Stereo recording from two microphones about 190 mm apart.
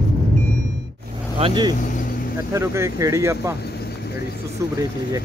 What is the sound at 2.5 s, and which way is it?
Speech, 15° right (ahead or behind).